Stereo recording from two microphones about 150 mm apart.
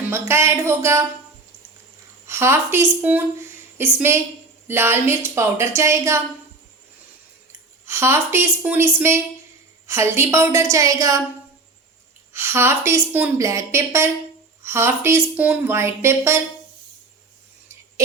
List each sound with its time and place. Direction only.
0.1 s speech: 15° right (ahead or behind)
2.2 s speech: 15° right (ahead or behind)
7.9 s a woman's voice: 15° right (ahead or behind)
12.3 s speech: 15° right (ahead or behind)